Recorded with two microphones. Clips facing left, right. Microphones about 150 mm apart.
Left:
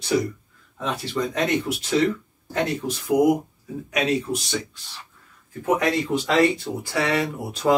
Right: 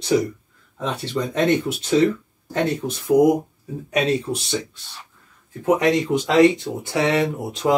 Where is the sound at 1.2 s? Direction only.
20° right (ahead or behind).